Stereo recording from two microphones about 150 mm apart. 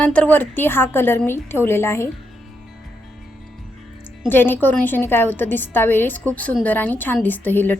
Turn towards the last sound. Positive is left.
turn(degrees=15)  # may be behind; listen again after turning